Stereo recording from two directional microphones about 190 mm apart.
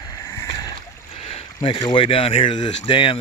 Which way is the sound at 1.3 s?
30° left (ahead or behind).